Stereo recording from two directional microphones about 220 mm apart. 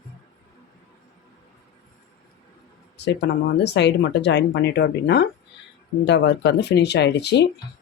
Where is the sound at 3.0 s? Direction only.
50° left (ahead or behind).